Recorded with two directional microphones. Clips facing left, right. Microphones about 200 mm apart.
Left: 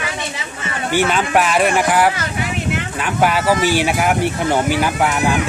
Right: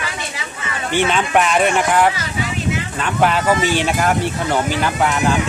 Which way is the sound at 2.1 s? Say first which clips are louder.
Left 1 dB; 60° left (ahead or behind).